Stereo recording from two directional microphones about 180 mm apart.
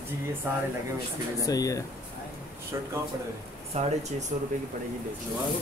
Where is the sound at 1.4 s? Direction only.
20° left (ahead or behind).